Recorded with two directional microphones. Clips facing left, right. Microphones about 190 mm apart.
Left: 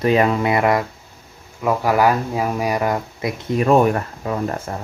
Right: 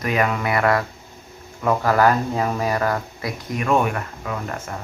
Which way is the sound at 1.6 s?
10° left (ahead or behind).